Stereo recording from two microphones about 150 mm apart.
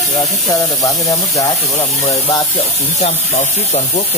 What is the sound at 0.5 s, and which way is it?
Speech, 20° left (ahead or behind).